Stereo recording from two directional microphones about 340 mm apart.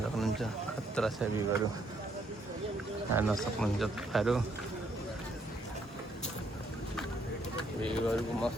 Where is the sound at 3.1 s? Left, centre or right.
Centre.